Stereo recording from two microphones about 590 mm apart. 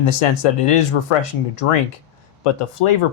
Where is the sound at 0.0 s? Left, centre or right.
Left.